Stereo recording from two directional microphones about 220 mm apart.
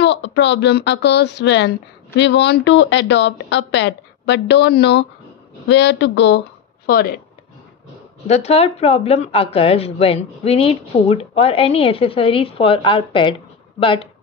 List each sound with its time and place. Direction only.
0.0 s speech: 55° left (ahead or behind)
8.3 s speech: 30° left (ahead or behind)